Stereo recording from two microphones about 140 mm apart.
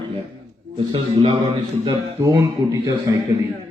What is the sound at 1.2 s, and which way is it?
Speech, 35° right (ahead or behind).